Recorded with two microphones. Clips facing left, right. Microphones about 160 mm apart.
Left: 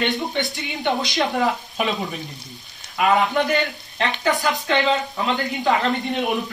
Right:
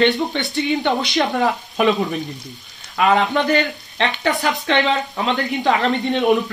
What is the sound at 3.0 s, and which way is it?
Speech, 70° right (ahead or behind).